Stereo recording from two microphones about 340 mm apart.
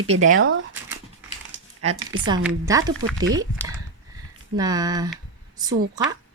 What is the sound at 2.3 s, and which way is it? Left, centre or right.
A woman's voice, centre.